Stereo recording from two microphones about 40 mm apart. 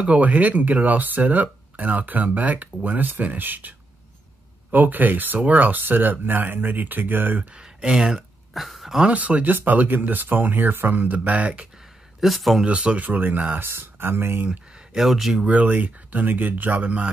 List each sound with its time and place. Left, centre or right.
0.0 s speech: right
7.5 s a sound: right
7.9 s speech: centre
8.5 s speech: centre
9.1 s speech: right
12.2 s speech: centre
12.6 s speech: right
13.0 s speech: right
13.6 s speech: right
15.0 s speech: centre
15.4 s speech: right